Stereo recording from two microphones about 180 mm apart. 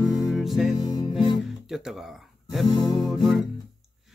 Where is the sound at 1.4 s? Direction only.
Centre (ahead or behind).